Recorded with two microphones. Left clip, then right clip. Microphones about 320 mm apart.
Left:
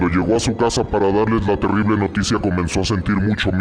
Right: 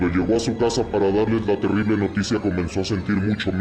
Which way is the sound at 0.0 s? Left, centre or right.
Left.